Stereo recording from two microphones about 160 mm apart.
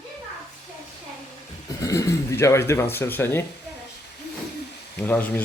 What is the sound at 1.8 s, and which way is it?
Speech, 20° left (ahead or behind).